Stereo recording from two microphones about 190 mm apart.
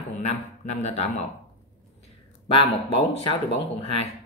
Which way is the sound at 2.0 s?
30° left (ahead or behind).